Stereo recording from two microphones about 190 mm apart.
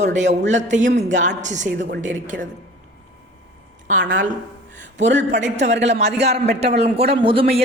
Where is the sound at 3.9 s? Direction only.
45° right (ahead or behind).